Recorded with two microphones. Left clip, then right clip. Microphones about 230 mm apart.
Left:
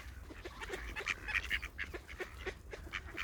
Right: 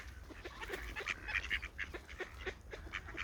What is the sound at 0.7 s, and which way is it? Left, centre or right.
Duck, centre.